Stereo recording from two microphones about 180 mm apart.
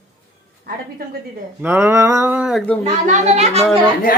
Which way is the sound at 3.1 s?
40° right (ahead or behind).